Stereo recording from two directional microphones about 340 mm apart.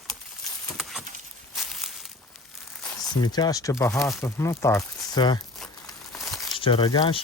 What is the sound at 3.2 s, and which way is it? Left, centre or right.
Speech, centre.